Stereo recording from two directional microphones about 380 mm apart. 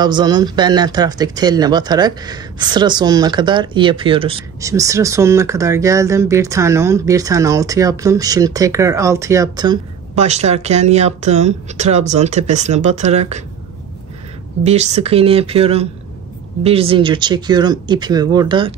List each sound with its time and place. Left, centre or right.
0.0 s speech: centre
14.6 s speech: centre